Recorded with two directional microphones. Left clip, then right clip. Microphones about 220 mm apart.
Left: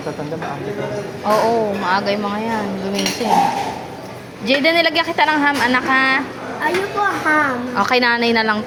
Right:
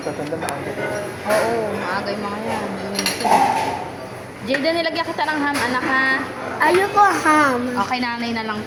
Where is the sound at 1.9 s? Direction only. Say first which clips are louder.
Left 6 dB; 45° left (ahead or behind).